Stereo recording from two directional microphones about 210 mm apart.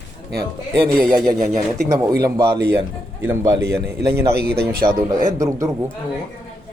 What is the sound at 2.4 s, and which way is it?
Speech, 15° right (ahead or behind).